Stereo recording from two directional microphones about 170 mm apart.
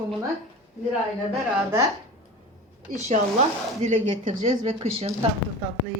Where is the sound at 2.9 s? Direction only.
45° right (ahead or behind).